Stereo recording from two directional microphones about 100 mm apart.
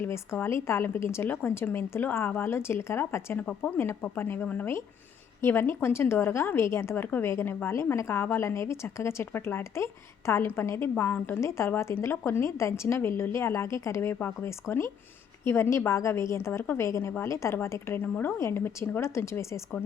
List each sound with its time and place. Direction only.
0.0 s a woman's voice: 25° left (ahead or behind)